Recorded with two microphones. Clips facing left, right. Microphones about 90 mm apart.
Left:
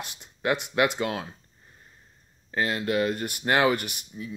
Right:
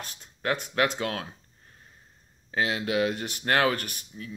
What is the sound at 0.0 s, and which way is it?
Speech, 10° left (ahead or behind).